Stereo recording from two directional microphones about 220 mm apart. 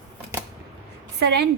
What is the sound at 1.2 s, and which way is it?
Speech, 50° right (ahead or behind).